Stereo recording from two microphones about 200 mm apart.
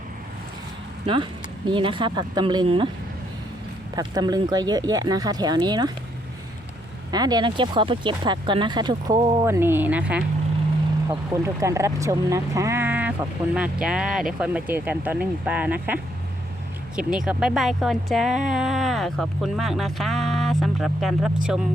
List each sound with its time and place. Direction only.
1.0 s speech: 25° right (ahead or behind)
3.9 s speech: 20° right (ahead or behind)
7.1 s speech: 20° right (ahead or behind); by 21.3 s centre (ahead or behind)